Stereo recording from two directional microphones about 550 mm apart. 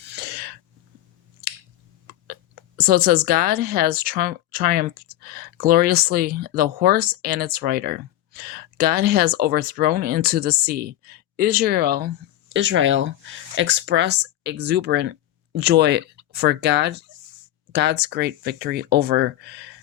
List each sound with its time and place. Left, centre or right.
0.1 s sneeze: centre
2.2 s speech: centre